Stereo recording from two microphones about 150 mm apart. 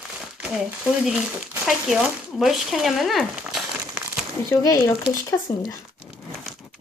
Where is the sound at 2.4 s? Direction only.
Centre (ahead or behind).